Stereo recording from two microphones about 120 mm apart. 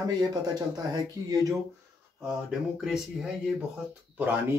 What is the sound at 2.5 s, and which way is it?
Speech, 5° right (ahead or behind).